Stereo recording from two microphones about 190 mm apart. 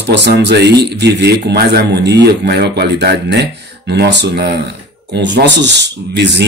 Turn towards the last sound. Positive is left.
turn(degrees=-65)  # may be behind; listen again after turning